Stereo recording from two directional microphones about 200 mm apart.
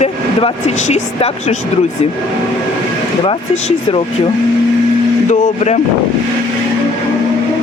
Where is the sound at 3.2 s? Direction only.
25° left (ahead or behind).